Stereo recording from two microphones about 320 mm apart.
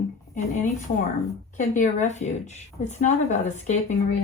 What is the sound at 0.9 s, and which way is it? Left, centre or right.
Speech, left.